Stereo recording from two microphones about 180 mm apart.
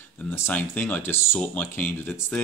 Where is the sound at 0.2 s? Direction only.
10° left (ahead or behind).